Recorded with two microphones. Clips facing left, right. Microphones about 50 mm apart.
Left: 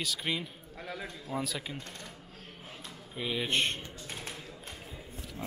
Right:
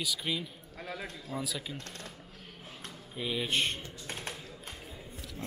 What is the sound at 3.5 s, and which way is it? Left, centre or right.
Speech, left.